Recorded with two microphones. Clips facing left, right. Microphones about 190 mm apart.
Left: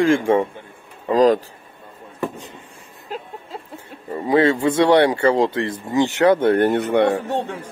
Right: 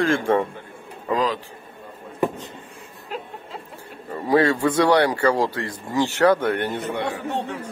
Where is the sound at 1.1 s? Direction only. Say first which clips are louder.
Left 8 dB; 40° left (ahead or behind).